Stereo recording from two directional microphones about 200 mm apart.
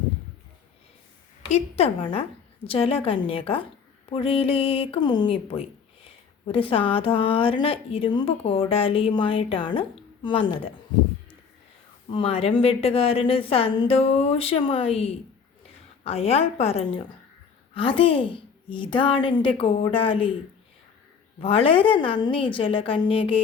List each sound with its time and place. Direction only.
1.5 s a woman's voice: 30° left (ahead or behind)
12.1 s a woman's voice: 30° left (ahead or behind)
21.4 s a woman's voice: 25° left (ahead or behind)